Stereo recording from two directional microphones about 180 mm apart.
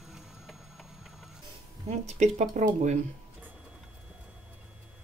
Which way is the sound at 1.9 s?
40° right (ahead or behind).